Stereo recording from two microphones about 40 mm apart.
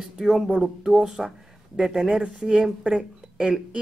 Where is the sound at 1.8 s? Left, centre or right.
Centre.